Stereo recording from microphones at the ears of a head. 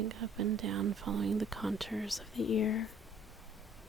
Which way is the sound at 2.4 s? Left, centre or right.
Left.